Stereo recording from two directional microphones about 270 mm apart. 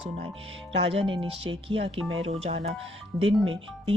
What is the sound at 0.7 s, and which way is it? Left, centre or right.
Speech, right.